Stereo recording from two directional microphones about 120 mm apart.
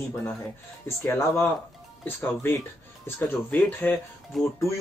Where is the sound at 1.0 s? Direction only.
20° left (ahead or behind).